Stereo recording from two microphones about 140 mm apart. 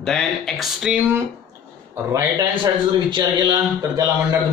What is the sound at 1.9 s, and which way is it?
Speech, 20° right (ahead or behind).